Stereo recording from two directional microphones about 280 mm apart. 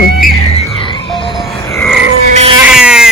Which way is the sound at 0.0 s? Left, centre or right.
Left.